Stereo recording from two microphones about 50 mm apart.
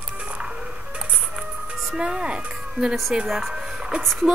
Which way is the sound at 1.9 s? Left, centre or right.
Centre.